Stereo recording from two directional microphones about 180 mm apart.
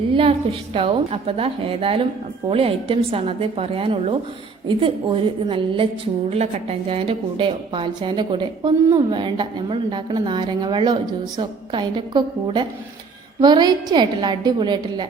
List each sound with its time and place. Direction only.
0.1 s a woman's voice: 30° right (ahead or behind)